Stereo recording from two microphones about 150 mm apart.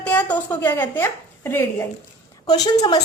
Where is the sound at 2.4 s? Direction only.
25° left (ahead or behind).